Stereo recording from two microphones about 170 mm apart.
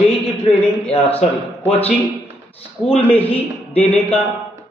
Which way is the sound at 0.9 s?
35° left (ahead or behind).